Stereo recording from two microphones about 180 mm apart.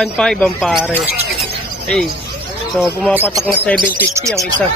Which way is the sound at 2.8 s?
Centre (ahead or behind).